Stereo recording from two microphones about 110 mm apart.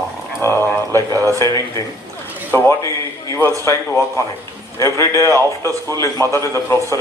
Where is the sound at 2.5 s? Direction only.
20° left (ahead or behind).